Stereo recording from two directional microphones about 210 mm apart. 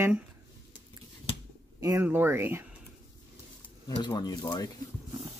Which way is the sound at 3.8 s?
20° left (ahead or behind).